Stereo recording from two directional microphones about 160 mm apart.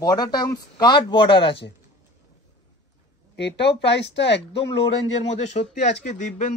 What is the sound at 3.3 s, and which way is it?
Speech, 90° left.